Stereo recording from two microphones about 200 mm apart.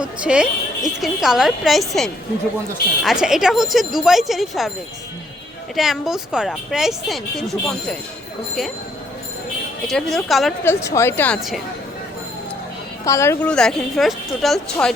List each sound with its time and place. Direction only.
0.0 s speech: 5° right (ahead or behind)
5.7 s speech: centre (ahead or behind)
9.8 s speech: centre (ahead or behind)
10.6 s speech: 10° left (ahead or behind)
13.1 s speech: 15° left (ahead or behind)